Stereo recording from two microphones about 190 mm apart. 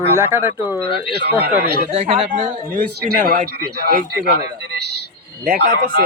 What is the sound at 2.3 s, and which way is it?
Speech, 45° right (ahead or behind).